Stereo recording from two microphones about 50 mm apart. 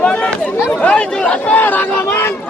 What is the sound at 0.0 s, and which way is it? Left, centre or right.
Chatter, left.